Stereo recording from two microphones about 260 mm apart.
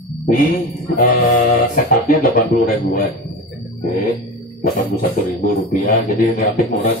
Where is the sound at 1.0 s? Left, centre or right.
Left.